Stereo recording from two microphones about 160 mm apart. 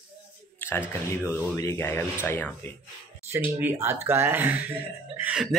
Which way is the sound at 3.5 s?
15° right (ahead or behind).